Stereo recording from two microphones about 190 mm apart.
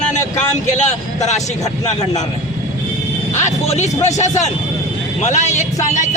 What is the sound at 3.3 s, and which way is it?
Speech, 35° left (ahead or behind).